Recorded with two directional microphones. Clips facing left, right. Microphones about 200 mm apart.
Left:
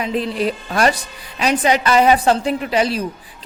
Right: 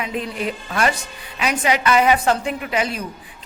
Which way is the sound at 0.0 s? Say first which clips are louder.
Left 5 dB; 35° left (ahead or behind).